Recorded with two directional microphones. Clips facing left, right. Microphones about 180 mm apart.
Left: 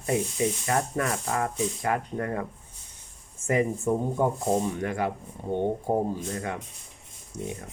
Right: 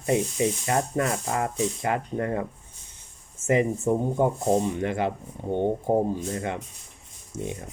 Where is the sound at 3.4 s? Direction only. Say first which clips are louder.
Right 2 dB; 25° right (ahead or behind).